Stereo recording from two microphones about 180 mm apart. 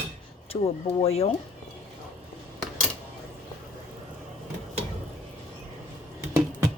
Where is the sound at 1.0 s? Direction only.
35° left (ahead or behind).